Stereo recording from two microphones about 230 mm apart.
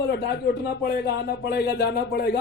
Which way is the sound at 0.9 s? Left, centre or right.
Left.